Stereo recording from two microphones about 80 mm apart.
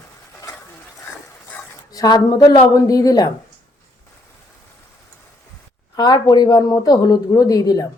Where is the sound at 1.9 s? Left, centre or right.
Left.